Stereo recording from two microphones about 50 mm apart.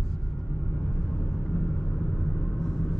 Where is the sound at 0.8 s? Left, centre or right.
Centre.